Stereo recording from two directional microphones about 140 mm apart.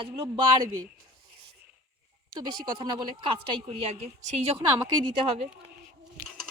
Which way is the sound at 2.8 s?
30° right (ahead or behind).